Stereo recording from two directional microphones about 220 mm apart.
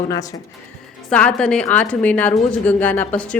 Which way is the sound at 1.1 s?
5° left (ahead or behind).